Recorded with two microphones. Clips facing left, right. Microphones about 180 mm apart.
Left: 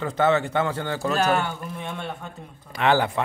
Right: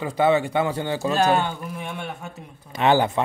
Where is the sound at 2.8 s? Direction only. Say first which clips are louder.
Right 2 dB; 20° right (ahead or behind).